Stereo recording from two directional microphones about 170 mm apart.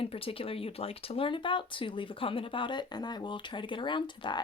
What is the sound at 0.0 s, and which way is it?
Speech, 35° left (ahead or behind).